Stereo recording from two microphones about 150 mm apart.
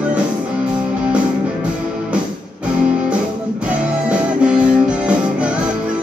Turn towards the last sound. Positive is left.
turn(degrees=-5)  # may be behind; listen again after turning